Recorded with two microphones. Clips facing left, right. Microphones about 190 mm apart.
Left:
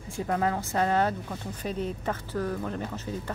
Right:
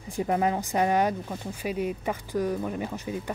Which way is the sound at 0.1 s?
15° right (ahead or behind).